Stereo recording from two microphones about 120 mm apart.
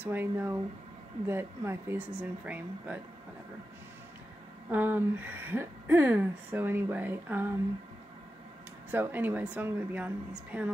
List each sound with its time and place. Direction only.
0.0 s speech: 15° right (ahead or behind)
4.6 s speech: 15° right (ahead or behind)
8.9 s speech: 15° right (ahead or behind)